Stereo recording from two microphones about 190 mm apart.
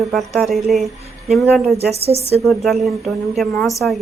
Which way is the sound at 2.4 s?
Centre (ahead or behind).